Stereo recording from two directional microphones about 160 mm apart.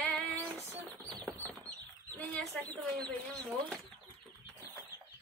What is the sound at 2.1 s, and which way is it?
Speech, 5° left (ahead or behind).